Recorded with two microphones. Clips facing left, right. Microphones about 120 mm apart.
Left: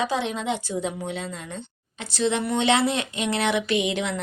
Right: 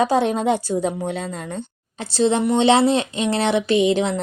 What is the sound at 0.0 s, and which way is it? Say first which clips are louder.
A woman's voice: right 8 dB; 45° right (ahead or behind).